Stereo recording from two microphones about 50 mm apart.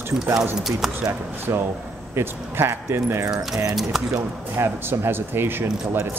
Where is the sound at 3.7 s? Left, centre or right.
Centre.